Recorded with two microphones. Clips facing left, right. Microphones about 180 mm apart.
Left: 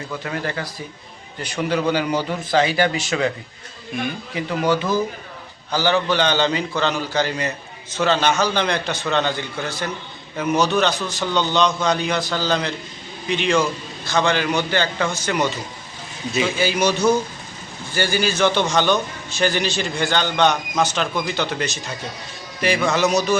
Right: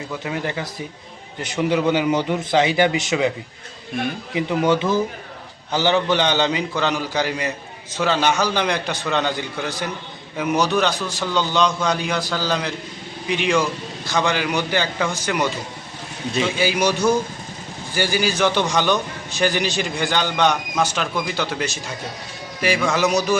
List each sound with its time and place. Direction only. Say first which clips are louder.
0.3 s a man's voice: right 1 dB; 15° right (ahead or behind)
4.4 s a man's voice: right 2 dB; 20° right (ahead or behind)
16.6 s a man's voice: even; 10° right (ahead or behind)